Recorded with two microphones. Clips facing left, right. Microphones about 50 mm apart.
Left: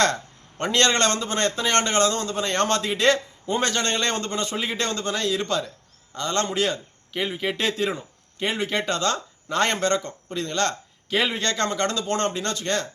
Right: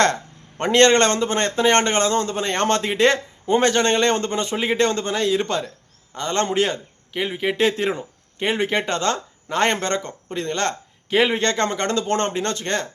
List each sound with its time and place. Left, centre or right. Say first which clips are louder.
0.6 s a man's voice: right 6 dB; right
7.1 s speech: right 3 dB; centre
7.5 s a man's voice: right 5 dB; right